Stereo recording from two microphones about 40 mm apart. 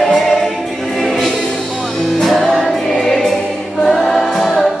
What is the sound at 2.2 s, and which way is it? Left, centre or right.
Music, centre.